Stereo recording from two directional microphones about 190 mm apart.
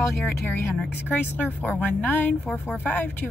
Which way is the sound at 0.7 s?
5° left (ahead or behind).